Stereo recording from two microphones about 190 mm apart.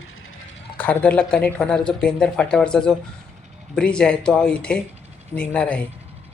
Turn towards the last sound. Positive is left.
turn(degrees=5)  # may be behind; listen again after turning